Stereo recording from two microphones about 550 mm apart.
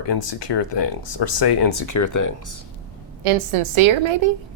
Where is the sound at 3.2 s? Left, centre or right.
Right.